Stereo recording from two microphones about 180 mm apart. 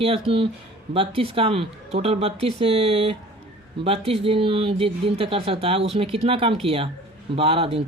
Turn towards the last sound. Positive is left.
turn(degrees=-35)  # may be behind; listen again after turning